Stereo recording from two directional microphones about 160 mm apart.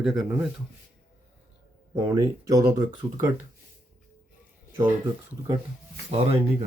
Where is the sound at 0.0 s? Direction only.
Centre (ahead or behind).